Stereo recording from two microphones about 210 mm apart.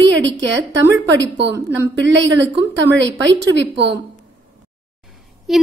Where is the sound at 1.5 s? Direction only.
10° right (ahead or behind).